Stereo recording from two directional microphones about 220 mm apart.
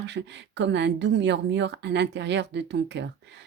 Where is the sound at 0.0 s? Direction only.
50° right (ahead or behind).